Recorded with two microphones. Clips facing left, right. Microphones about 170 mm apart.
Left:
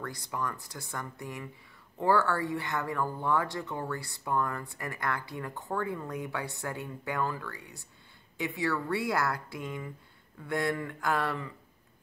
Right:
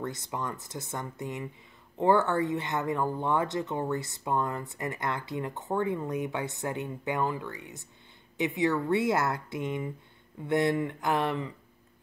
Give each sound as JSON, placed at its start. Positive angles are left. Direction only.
{"t": 0.0, "sound": "speech", "side_deg": -20}